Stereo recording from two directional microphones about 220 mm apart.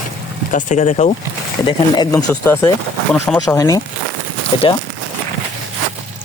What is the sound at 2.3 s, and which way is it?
Speech, 10° left (ahead or behind).